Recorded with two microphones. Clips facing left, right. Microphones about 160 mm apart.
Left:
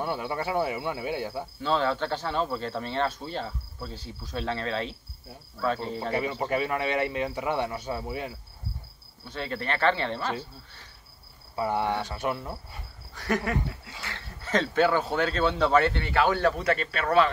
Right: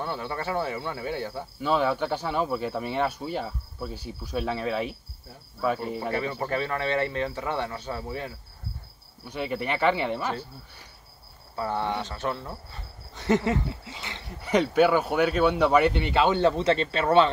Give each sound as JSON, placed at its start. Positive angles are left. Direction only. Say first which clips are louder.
{"t": 0.0, "sound": "speech", "louder": "left 1 dB", "side_deg": 15}
{"t": 1.6, "sound": "speech", "louder": "right 2 dB", "side_deg": -10}
{"t": 6.1, "sound": "speech", "louder": "left 3 dB", "side_deg": 15}
{"t": 9.2, "sound": "speech", "louder": "right 3 dB", "side_deg": -15}
{"t": 11.5, "sound": "speech", "louder": "left 1 dB", "side_deg": 15}
{"t": 13.1, "sound": "speech", "louder": "right 4 dB", "side_deg": -25}